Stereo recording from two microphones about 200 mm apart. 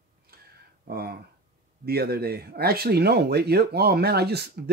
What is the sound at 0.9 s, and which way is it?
Speech, 50° right (ahead or behind).